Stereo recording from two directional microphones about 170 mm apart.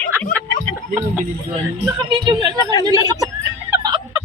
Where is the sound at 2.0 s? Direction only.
30° right (ahead or behind).